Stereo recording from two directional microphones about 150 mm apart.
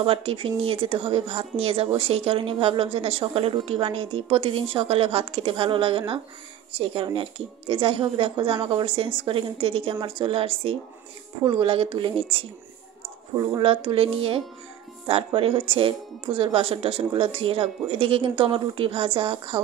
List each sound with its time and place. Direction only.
0.0 s a woman's voice: 40° right (ahead or behind)
13.6 s a woman's voice: 35° right (ahead or behind)